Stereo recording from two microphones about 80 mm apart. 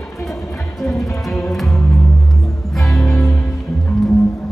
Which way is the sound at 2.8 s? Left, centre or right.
Centre.